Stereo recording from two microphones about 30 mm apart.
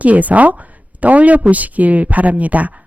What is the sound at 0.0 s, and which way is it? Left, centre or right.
Speech, right.